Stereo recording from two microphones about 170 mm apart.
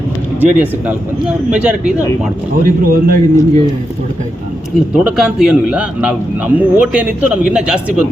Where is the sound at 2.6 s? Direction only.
60° right (ahead or behind).